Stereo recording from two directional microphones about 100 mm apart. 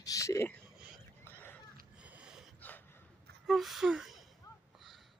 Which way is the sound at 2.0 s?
15° right (ahead or behind).